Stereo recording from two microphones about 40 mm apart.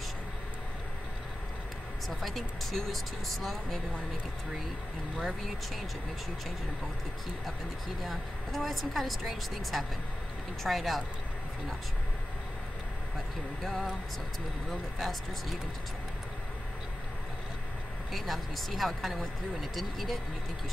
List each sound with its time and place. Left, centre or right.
2.0 s speech: centre
5.1 s speech: centre
8.0 s speech: centre
13.6 s speech: centre
18.1 s speech: centre